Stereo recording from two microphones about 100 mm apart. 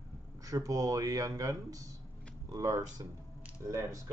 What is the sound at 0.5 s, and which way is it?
Speech, 35° right (ahead or behind).